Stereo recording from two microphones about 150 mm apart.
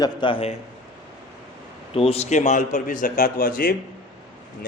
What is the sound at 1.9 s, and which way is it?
A man's voice, 40° left (ahead or behind).